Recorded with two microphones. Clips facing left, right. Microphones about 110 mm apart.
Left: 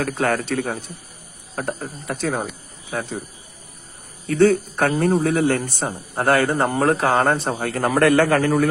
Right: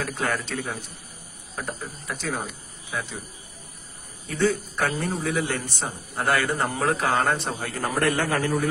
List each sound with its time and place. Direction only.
0.0 s a man's voice: 50° left (ahead or behind)
2.9 s a man's voice: 45° left (ahead or behind)
4.4 s a man's voice: 60° left (ahead or behind)
7.6 s a man's voice: 65° left (ahead or behind)